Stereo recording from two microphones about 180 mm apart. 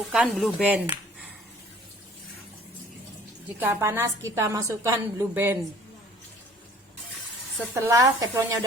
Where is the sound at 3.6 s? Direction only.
15° right (ahead or behind).